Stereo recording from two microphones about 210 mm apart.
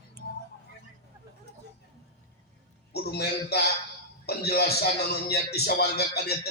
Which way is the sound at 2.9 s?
50° left (ahead or behind).